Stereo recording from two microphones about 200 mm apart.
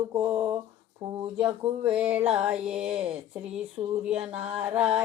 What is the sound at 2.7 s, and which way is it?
Mantra, 30° right (ahead or behind).